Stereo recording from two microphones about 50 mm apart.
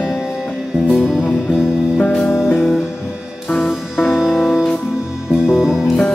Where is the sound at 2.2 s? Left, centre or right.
Left.